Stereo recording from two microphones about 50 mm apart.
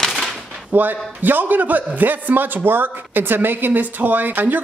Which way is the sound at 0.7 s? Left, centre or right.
Right.